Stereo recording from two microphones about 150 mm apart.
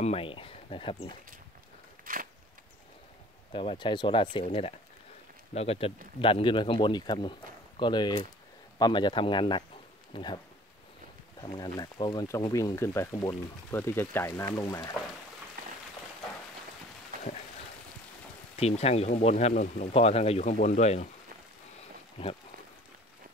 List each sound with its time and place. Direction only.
0.0 s speech: 40° left (ahead or behind)
2.1 s a sound: 70° right (ahead or behind)
3.5 s speech: 35° left (ahead or behind)
11.4 s speech: 25° left (ahead or behind)
17.1 s a sound: 70° right (ahead or behind)
18.6 s speech: 45° left (ahead or behind); by 19.9 s 60° left (ahead or behind)
19.9 s speech: 45° left (ahead or behind)